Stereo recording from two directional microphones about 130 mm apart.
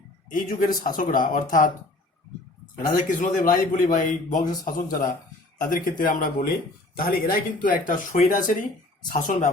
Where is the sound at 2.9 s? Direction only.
85° left.